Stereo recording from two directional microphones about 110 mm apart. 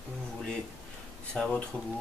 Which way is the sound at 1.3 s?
5° left (ahead or behind).